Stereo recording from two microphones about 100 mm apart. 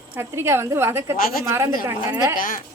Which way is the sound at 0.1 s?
25° right (ahead or behind).